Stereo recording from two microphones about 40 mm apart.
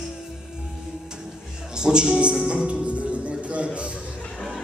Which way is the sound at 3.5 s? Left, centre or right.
Right.